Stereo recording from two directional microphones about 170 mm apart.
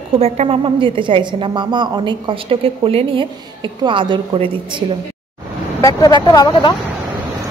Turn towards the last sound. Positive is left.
turn(degrees=25)  # may be behind; listen again after turning